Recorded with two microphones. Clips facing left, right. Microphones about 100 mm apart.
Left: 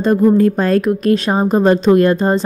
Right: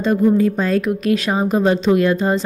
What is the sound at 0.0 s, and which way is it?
A woman's voice, 45° left (ahead or behind).